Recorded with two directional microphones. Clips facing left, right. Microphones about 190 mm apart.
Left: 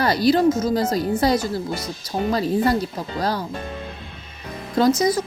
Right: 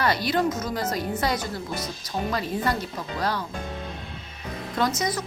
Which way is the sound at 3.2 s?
35° left (ahead or behind).